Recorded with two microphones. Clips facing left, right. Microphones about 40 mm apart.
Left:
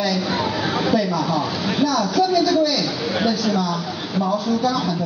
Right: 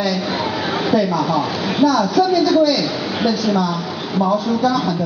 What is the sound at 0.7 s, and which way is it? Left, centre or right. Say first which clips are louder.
A woman's voice: right 4 dB; centre.